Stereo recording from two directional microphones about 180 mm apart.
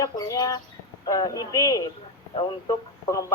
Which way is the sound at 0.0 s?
20° left (ahead or behind).